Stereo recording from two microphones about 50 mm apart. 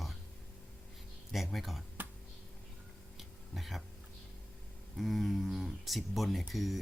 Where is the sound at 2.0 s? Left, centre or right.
Right.